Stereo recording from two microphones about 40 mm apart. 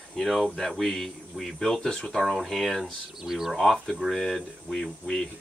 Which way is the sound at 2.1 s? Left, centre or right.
Centre.